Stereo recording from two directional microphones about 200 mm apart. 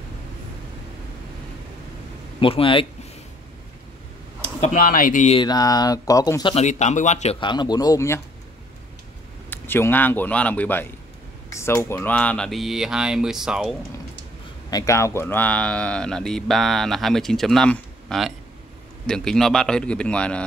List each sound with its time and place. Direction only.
2.4 s speech: 25° left (ahead or behind)
4.6 s speech: 40° left (ahead or behind)
5.4 s speech: 20° left (ahead or behind)
6.5 s speech: 35° left (ahead or behind)
7.3 s speech: 20° left (ahead or behind)
9.5 s speech: 10° left (ahead or behind)
14.7 s speech: 15° left (ahead or behind)